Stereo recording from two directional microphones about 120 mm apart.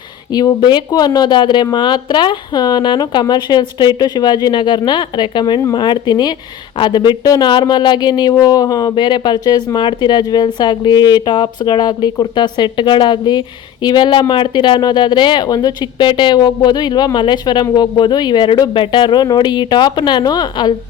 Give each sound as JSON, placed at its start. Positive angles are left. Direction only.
{"t": 0.3, "sound": "speech", "side_deg": 35}